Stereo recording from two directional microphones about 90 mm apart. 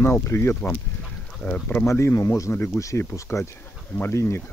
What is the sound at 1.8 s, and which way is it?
Speech, 30° left (ahead or behind).